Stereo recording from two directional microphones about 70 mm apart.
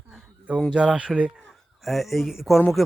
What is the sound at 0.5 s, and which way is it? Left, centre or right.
Speech, centre.